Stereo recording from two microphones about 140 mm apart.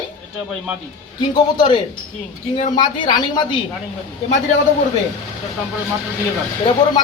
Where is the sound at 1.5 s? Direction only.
35° left (ahead or behind).